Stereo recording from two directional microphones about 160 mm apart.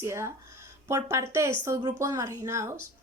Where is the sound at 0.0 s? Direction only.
15° right (ahead or behind).